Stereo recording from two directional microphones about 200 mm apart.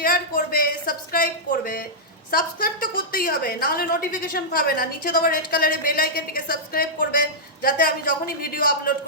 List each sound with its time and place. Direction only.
0.0 s a woman's voice: 50° left (ahead or behind)